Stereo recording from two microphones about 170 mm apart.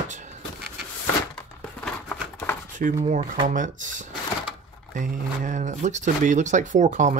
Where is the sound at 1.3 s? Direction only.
10° left (ahead or behind).